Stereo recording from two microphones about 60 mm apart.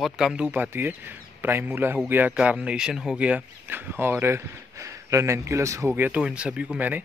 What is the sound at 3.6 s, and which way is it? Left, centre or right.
Speech, right.